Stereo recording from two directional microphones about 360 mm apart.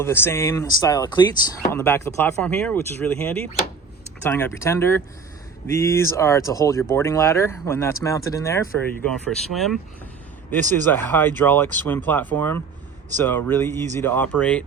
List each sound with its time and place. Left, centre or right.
0.0 s speech: centre